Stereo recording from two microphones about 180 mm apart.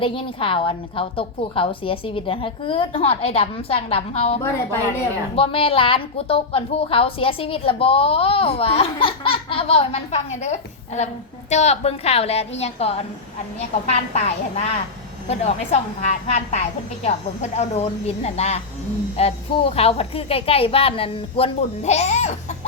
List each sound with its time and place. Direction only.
0.0 s a woman's voice: 30° left (ahead or behind)